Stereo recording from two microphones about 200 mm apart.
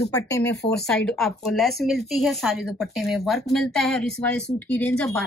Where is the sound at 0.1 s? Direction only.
15° left (ahead or behind).